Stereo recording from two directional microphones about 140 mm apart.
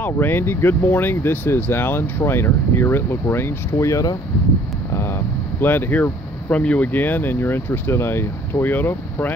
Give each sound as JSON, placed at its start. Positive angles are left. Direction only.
{"t": 0.0, "sound": "speech", "side_deg": 15}
{"t": 5.6, "sound": "speech", "side_deg": 15}